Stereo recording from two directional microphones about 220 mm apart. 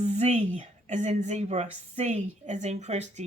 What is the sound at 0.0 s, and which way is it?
A woman's voice, 30° right (ahead or behind).